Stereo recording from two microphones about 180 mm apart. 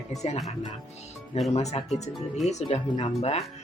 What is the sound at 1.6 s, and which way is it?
Speech, 40° left (ahead or behind).